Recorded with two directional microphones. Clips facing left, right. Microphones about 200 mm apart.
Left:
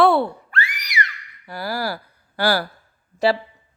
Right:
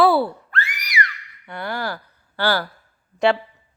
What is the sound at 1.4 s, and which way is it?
Speech, 5° left (ahead or behind).